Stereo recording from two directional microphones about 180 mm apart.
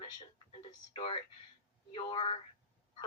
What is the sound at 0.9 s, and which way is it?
Speech, 30° left (ahead or behind).